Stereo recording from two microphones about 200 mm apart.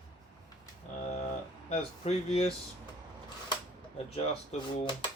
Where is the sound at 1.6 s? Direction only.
30° left (ahead or behind).